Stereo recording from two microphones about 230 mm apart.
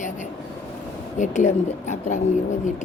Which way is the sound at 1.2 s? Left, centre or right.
Left.